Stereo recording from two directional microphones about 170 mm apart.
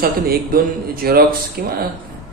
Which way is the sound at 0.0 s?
60° right (ahead or behind).